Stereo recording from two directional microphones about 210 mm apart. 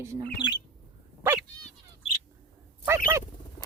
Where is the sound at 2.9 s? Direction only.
10° right (ahead or behind).